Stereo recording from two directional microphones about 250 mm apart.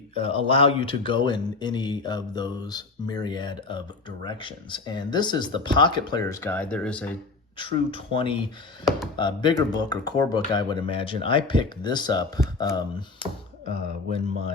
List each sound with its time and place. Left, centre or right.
0.1 s speech: left; by 7.1 s centre
7.6 s speech: left